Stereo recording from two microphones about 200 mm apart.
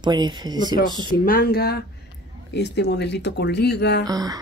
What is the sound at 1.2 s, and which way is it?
Speech, 45° left (ahead or behind).